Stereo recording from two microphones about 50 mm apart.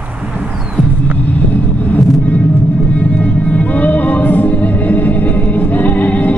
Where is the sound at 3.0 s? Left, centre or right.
Left.